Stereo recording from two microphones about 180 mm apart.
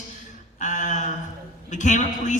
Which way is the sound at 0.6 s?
45° left (ahead or behind).